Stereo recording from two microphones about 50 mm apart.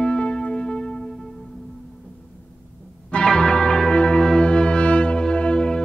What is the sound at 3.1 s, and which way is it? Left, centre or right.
Music, centre.